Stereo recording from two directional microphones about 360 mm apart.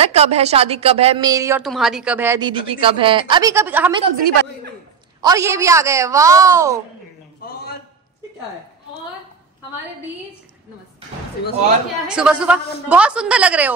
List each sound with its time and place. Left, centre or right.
0.0 s a woman's voice: centre
4.0 s a woman's voice: right
5.2 s a woman's voice: centre
7.4 s a sound: left
12.1 s a woman's voice: centre